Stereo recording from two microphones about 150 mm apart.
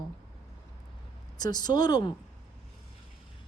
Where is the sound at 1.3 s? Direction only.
25° left (ahead or behind).